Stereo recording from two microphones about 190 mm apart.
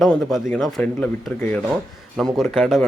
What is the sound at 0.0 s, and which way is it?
A man's voice, centre (ahead or behind).